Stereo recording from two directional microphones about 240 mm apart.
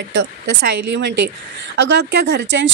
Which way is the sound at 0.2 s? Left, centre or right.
Right.